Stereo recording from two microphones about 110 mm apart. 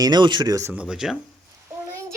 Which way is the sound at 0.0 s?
40° right (ahead or behind).